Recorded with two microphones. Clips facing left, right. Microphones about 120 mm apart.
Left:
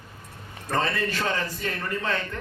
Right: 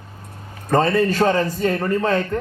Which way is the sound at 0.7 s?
45° right (ahead or behind).